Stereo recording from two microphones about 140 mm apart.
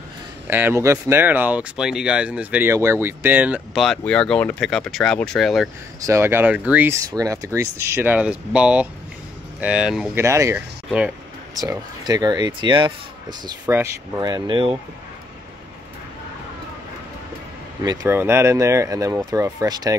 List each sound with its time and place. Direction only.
0.5 s speech: 15° right (ahead or behind)
3.8 s speech: 5° left (ahead or behind)
5.9 s speech: 20° right (ahead or behind); by 10.1 s 5° right (ahead or behind)
10.1 s speech: 20° right (ahead or behind)
13.7 s speech: 20° right (ahead or behind)
14.2 s speech: 30° right (ahead or behind)
17.8 s speech: 15° right (ahead or behind)